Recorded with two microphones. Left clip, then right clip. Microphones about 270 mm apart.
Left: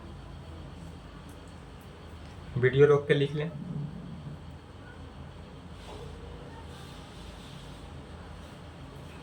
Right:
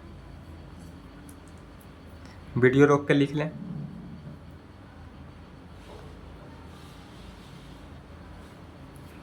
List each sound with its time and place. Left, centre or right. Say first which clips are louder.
2.6 s speech: right 2 dB; centre